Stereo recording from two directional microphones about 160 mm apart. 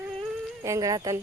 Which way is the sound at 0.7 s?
20° right (ahead or behind).